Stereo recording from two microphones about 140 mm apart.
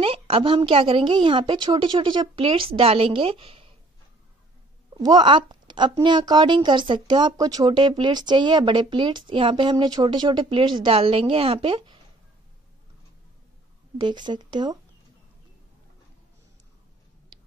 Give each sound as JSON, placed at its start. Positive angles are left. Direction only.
{"t": 0.0, "sound": "speech", "side_deg": -40}
{"t": 4.9, "sound": "a woman's voice", "side_deg": -30}
{"t": 13.9, "sound": "speech", "side_deg": -35}